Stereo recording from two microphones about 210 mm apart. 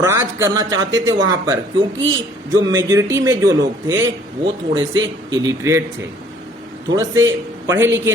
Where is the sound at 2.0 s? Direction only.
65° right (ahead or behind).